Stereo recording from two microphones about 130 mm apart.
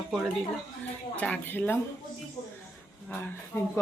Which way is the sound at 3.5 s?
20° left (ahead or behind).